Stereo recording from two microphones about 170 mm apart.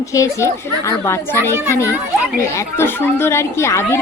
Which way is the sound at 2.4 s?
15° left (ahead or behind).